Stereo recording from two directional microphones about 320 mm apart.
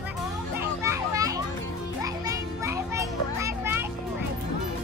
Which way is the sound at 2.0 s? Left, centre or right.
Centre.